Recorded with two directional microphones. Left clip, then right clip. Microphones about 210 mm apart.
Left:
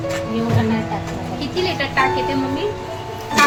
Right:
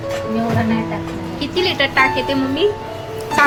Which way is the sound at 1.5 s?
25° right (ahead or behind).